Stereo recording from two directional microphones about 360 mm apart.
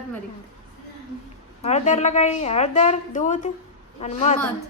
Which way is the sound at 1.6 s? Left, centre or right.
Centre.